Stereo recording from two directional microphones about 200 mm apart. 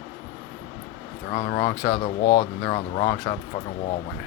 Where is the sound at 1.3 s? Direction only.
30° left (ahead or behind).